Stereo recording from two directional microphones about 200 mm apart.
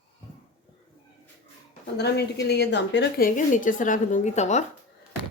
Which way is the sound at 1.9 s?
55° left (ahead or behind).